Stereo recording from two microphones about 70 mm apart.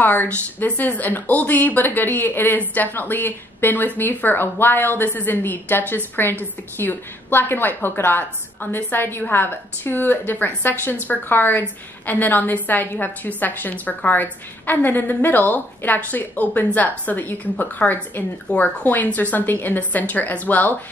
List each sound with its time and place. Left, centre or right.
0.0 s speech: left